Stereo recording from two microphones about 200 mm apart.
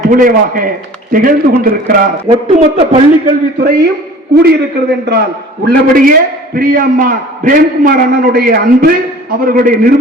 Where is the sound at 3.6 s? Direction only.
50° right (ahead or behind).